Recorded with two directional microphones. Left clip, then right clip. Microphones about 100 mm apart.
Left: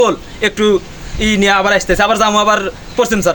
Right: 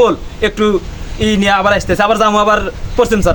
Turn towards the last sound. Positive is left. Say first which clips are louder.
# right 1 dB
turn(degrees=-20)  # may be behind; listen again after turning